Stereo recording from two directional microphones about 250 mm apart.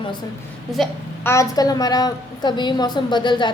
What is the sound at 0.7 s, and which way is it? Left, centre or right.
A woman's voice, centre.